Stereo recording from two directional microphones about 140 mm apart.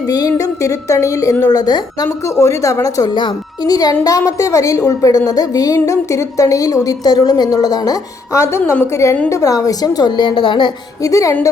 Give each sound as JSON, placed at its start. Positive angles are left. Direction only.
{"t": 0.1, "sound": "a woman's voice", "side_deg": 25}